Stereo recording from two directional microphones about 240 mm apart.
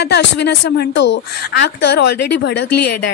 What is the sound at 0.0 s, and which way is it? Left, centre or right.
Speech, left.